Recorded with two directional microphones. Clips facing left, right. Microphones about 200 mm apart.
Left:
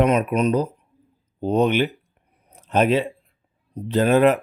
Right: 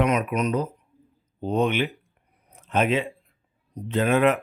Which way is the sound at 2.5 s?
35° left (ahead or behind).